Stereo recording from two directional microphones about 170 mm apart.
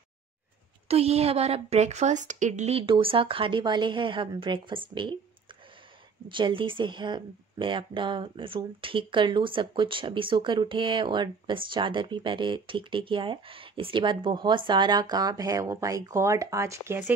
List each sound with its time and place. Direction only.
0.8 s a woman's voice: 35° right (ahead or behind)
6.2 s speech: 30° right (ahead or behind)